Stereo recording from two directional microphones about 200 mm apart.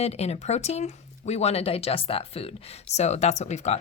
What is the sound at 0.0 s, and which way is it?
Speech, 30° left (ahead or behind).